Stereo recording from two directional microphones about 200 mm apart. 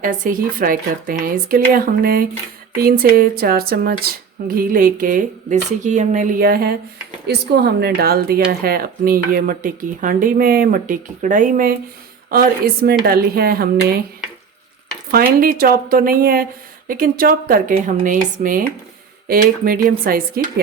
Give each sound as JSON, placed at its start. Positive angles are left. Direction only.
{"t": 0.0, "sound": "speech", "side_deg": -45}
{"t": 15.1, "sound": "speech", "side_deg": -45}